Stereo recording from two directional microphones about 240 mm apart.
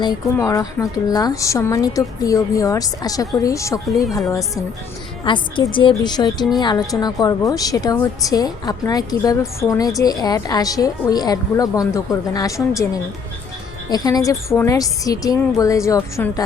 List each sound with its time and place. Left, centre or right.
0.0 s a woman's voice: centre
13.9 s a woman's voice: centre